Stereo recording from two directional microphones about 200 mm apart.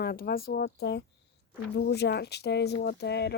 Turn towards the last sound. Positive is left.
turn(degrees=55)  # may be behind; listen again after turning